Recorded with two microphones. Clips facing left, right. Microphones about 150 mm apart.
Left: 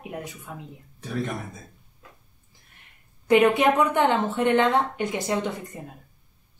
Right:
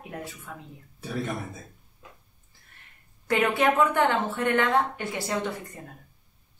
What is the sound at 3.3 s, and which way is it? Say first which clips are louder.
A woman's voice: left 5 dB; 20° left (ahead or behind).